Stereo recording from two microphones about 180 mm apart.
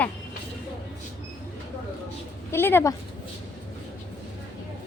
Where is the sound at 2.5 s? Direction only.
15° left (ahead or behind).